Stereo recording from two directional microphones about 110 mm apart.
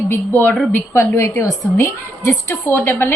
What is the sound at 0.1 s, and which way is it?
Speech, 15° left (ahead or behind).